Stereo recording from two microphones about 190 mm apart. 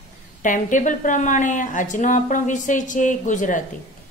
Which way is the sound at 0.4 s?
45° left (ahead or behind).